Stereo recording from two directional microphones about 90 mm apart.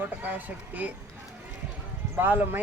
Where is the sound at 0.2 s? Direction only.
20° right (ahead or behind).